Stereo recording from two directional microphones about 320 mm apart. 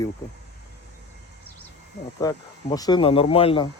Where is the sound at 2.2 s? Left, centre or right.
Centre.